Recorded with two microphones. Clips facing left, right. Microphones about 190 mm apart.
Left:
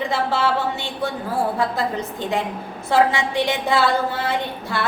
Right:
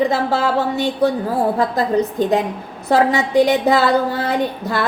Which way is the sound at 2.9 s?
40° right (ahead or behind).